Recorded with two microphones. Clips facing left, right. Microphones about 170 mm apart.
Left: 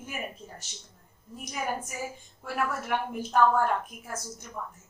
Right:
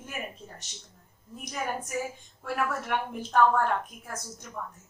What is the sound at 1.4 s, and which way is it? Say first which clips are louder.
A woman's voice: left 1 dB; 5° left (ahead or behind).